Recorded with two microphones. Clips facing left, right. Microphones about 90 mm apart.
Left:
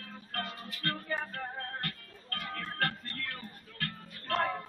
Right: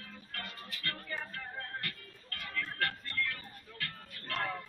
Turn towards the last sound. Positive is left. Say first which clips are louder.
# left 6 dB
turn(degrees=40)  # may be behind; listen again after turning